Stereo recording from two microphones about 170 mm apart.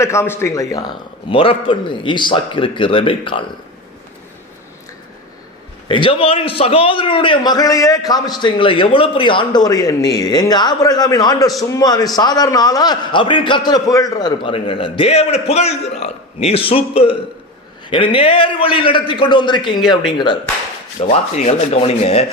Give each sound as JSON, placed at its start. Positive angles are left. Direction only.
{"t": 0.0, "sound": "a man's voice", "side_deg": 15}
{"t": 1.3, "sound": "a man's voice", "side_deg": 30}
{"t": 5.9, "sound": "a man's voice", "side_deg": 30}
{"t": 21.1, "sound": "a man's voice", "side_deg": 40}